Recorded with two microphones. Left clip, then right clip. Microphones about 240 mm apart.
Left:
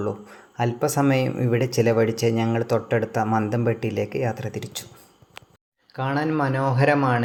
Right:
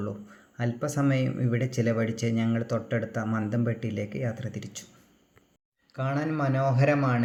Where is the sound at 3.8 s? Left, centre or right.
Left.